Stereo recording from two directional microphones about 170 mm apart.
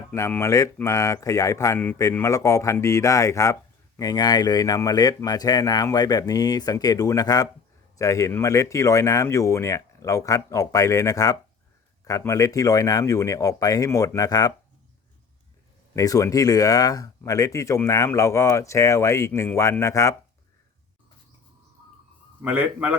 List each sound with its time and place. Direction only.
0.1 s speech: 15° left (ahead or behind)
16.0 s speech: 20° left (ahead or behind)
22.4 s a man's voice: 10° right (ahead or behind)